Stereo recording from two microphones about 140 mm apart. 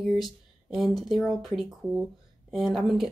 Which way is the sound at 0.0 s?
Centre (ahead or behind).